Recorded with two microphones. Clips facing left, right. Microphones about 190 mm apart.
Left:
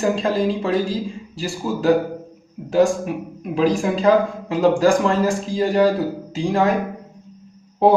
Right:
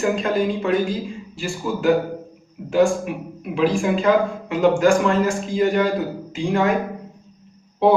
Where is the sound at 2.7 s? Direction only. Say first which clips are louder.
Left 1 dB; 35° left (ahead or behind).